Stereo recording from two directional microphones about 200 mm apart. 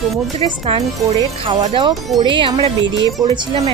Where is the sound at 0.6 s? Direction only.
25° right (ahead or behind).